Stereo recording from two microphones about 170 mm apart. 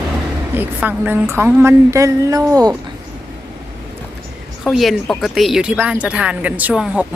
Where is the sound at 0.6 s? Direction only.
10° right (ahead or behind).